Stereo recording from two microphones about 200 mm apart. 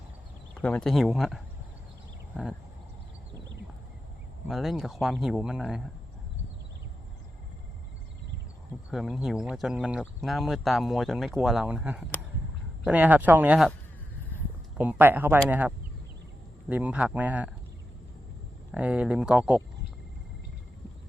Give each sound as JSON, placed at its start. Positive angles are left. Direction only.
{"t": 0.6, "sound": "speech", "side_deg": 5}
{"t": 4.4, "sound": "speech", "side_deg": 0}
{"t": 8.9, "sound": "speech", "side_deg": 0}
{"t": 18.7, "sound": "speech", "side_deg": -5}